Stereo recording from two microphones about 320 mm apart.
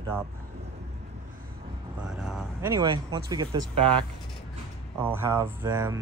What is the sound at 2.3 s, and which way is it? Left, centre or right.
Speech, centre.